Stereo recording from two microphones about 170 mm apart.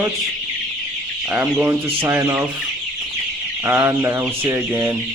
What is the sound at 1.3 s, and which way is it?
Chicken, 15° right (ahead or behind).